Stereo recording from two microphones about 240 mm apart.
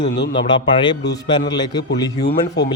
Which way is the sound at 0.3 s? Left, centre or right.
Centre.